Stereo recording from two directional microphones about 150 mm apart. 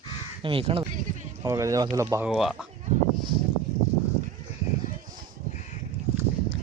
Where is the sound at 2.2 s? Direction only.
5° right (ahead or behind).